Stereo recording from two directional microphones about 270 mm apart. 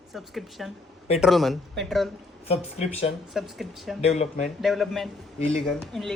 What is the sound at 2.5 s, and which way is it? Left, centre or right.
Speech, left.